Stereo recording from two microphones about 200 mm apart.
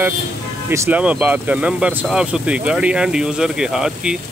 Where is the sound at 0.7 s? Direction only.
10° right (ahead or behind).